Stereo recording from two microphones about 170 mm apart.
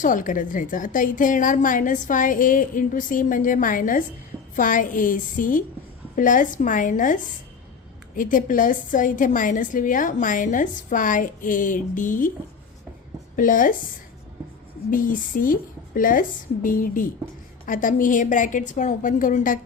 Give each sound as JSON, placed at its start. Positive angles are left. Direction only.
{"t": 0.0, "sound": "a woman's voice", "side_deg": 50}
{"t": 13.3, "sound": "a woman's voice", "side_deg": 50}